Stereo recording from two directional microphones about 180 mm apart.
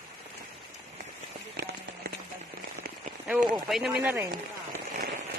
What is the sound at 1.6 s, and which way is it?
Rain on surface, 70° right (ahead or behind).